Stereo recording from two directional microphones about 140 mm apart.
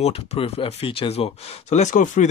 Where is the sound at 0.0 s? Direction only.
50° left (ahead or behind).